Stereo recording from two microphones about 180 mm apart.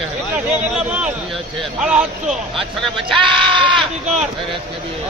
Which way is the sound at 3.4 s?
25° right (ahead or behind).